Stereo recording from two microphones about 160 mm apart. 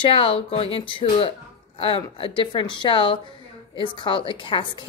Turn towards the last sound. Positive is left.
turn(degrees=30)  # may be behind; listen again after turning